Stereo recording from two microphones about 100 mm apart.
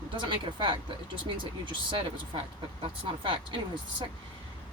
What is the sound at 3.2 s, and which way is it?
Speech, 55° right (ahead or behind).